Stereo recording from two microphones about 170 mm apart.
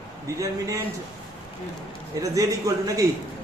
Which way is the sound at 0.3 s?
20° right (ahead or behind).